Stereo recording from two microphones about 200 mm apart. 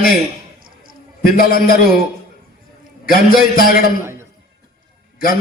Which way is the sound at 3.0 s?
45° left (ahead or behind).